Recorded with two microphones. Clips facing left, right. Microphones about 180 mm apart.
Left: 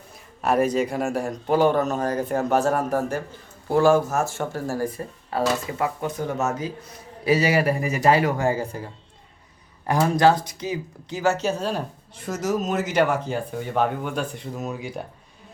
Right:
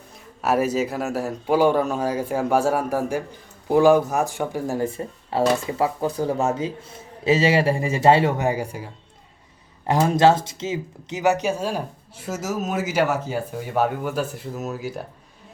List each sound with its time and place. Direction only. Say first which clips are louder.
0.4 s speech: even; 5° right (ahead or behind)
9.8 s speech: right 2 dB; 20° right (ahead or behind); by 15.0 s centre (ahead or behind)